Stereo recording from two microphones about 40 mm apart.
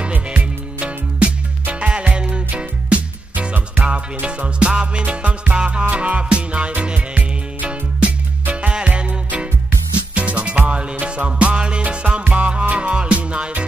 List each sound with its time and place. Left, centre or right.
0.0 s music: right